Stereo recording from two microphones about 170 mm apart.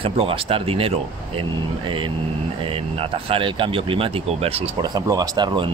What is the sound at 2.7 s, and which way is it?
Speech, 35° right (ahead or behind).